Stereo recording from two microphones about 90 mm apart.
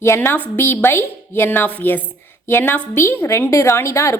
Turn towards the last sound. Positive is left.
turn(degrees=30)  # may be behind; listen again after turning